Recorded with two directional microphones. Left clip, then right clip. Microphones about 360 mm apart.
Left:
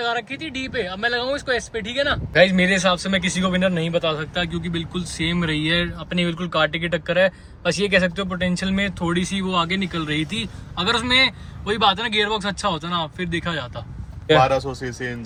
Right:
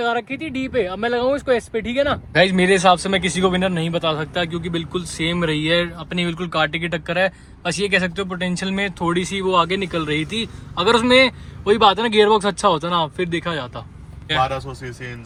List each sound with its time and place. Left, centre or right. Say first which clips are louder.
0.0 s speech: right 3 dB; centre
2.3 s speech: even; centre
14.3 s speech: left 4 dB; centre